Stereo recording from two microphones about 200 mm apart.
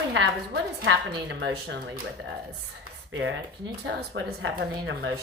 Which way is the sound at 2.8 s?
70° right (ahead or behind).